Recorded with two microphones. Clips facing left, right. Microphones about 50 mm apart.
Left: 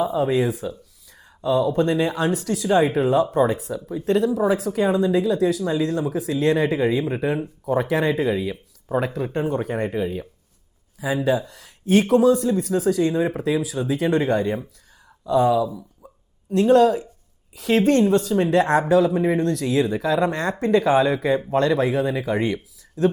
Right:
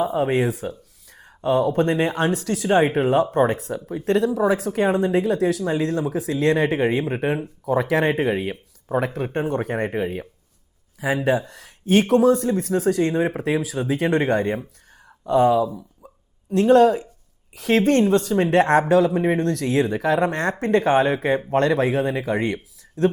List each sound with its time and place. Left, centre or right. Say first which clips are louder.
0.0 s speech: even; right
7.6 s speech: right 1 dB; right
16.0 s hiccup: even; right
17.5 s speech: even; right